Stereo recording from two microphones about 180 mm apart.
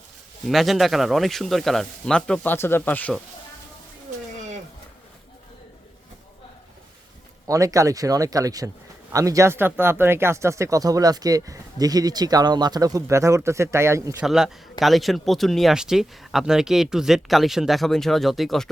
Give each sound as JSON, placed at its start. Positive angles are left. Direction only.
{"t": 0.4, "sound": "speech", "side_deg": 0}
{"t": 7.4, "sound": "speech", "side_deg": -20}
{"t": 14.2, "sound": "speech", "side_deg": -5}